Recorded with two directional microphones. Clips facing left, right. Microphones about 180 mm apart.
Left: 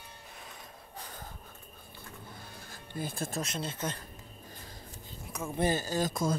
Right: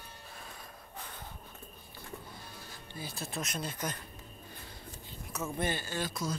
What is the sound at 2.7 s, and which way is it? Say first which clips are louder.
Music: left 7 dB; 50° left (ahead or behind).